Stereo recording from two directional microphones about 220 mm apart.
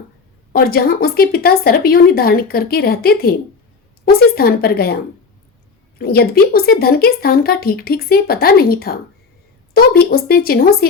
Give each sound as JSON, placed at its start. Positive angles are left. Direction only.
{"t": 0.5, "sound": "speech", "side_deg": 45}
{"t": 6.0, "sound": "speech", "side_deg": 45}